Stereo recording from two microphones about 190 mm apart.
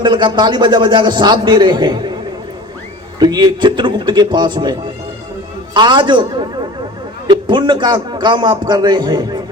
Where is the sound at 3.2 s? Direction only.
20° right (ahead or behind).